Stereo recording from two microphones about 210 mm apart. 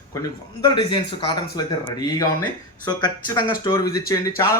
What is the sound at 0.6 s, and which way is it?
Speech, 20° left (ahead or behind).